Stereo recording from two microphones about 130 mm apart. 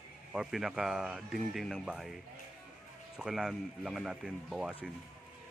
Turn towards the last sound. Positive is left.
turn(degrees=-5)  # may be behind; listen again after turning